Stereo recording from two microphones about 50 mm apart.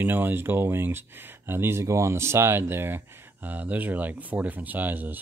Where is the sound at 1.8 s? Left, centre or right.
Right.